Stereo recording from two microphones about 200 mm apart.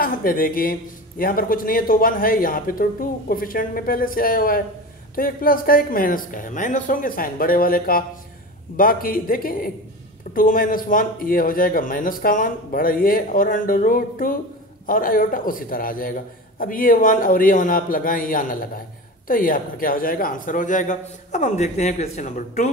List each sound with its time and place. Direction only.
0.0 s a man's voice: 45° left (ahead or behind)